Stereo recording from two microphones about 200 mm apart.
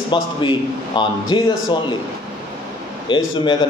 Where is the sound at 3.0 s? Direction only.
25° left (ahead or behind).